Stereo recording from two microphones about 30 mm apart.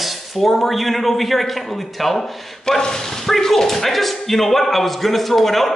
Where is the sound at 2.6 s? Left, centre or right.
Centre.